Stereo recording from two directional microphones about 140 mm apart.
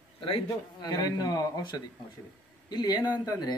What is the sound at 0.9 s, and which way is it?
Speech, 25° left (ahead or behind).